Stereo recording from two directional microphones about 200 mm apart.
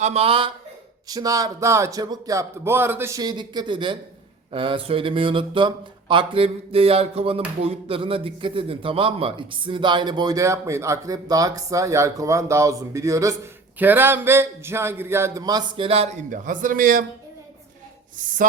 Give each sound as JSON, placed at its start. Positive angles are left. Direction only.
{"t": 0.0, "sound": "speech", "side_deg": -30}
{"t": 18.2, "sound": "speech", "side_deg": -40}